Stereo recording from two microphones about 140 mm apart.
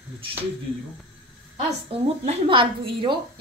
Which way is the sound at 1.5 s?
40° right (ahead or behind).